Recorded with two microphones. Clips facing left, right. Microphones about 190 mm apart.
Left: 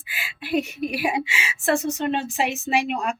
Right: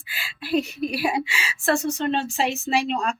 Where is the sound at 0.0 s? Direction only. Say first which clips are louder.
Left 1 dB; 15° left (ahead or behind).